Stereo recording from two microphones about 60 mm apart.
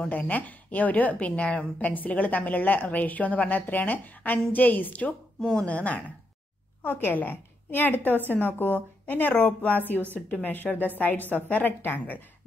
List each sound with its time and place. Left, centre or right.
0.1 s a woman's voice: left
5.4 s speech: centre
5.7 s a woman's voice: left
6.8 s a woman's voice: left
9.3 s a woman's voice: left